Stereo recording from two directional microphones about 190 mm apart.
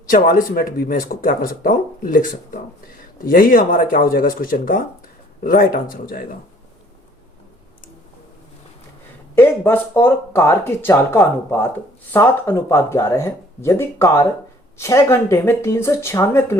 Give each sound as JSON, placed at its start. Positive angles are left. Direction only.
{"t": 0.1, "sound": "speech", "side_deg": 45}
{"t": 9.3, "sound": "speech", "side_deg": 10}